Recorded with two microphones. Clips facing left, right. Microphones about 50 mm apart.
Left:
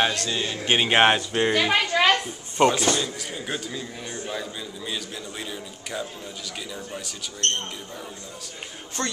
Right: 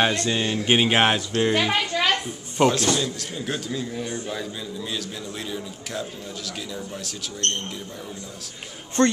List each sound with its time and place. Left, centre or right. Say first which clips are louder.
0.1 s speech: right 4 dB; right
0.7 s speech: left 1 dB; centre
1.7 s a sound: left 2 dB; left
2.5 s speech: even; centre
9.0 s a man's voice: right 10 dB; right